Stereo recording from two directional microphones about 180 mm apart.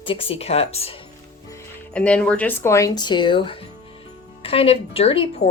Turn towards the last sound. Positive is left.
turn(degrees=30)  # may be behind; listen again after turning